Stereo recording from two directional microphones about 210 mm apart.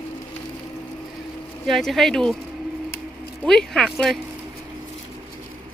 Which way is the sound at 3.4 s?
Centre (ahead or behind).